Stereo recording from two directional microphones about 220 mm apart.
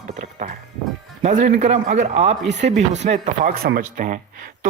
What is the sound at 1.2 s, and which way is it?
Speech, 35° right (ahead or behind).